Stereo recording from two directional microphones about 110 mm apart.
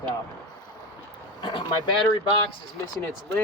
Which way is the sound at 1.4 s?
45° left (ahead or behind).